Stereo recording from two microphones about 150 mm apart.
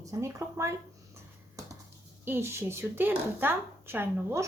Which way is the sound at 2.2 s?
15° right (ahead or behind).